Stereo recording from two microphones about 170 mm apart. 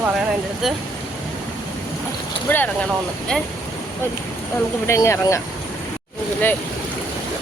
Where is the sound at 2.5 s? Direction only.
10° left (ahead or behind).